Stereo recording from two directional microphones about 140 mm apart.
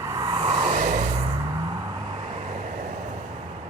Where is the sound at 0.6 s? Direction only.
60° right (ahead or behind).